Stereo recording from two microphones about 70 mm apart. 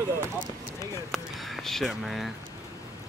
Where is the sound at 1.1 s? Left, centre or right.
Centre.